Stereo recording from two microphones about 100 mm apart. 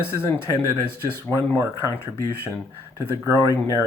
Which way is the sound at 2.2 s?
25° left (ahead or behind).